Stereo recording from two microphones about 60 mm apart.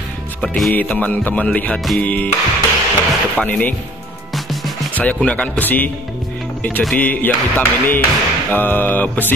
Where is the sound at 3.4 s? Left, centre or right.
Left.